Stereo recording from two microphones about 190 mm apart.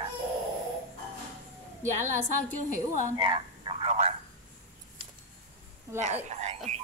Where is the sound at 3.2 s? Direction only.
30° right (ahead or behind).